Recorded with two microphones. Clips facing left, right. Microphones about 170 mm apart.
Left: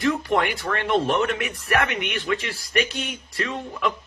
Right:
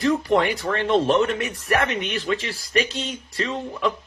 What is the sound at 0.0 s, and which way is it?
Speech, 30° right (ahead or behind).